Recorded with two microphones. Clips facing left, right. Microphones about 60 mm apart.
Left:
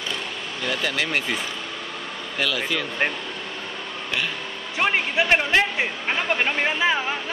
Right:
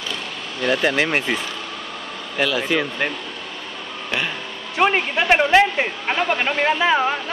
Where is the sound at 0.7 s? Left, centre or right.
Right.